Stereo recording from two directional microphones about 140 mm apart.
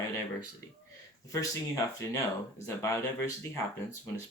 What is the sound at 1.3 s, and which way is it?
Speech, 25° left (ahead or behind).